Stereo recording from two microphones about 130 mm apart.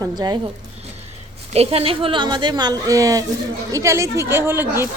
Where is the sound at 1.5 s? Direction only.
50° right (ahead or behind); by 4.9 s 15° right (ahead or behind).